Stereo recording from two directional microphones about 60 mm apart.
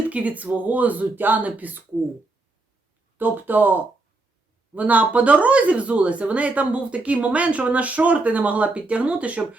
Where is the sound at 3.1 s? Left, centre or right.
Right.